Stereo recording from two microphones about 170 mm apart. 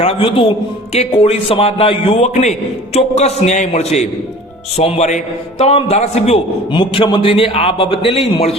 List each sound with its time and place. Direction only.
0.0 s a man's voice: 35° left (ahead or behind)